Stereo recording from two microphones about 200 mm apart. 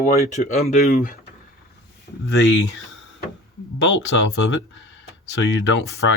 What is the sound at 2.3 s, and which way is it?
Speech, 70° left (ahead or behind).